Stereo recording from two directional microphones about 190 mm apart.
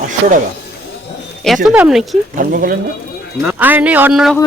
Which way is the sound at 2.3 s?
50° right (ahead or behind).